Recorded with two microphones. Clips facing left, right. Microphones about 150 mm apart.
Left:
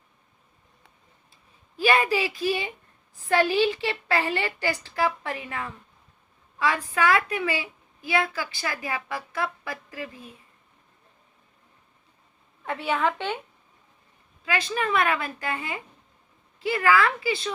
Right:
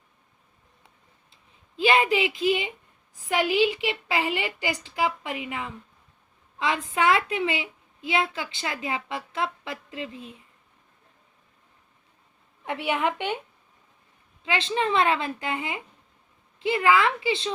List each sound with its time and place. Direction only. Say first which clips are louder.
1.7 s a woman's voice: right 1 dB; 20° right (ahead or behind)
12.6 s a woman's voice: even; 15° right (ahead or behind)
14.4 s a woman's voice: right 1 dB; 20° right (ahead or behind)